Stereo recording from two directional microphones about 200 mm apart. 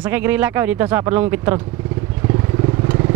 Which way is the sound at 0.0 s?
10° right (ahead or behind).